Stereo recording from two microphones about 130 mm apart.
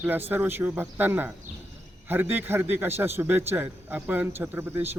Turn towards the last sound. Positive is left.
turn(degrees=-15)  # may be behind; listen again after turning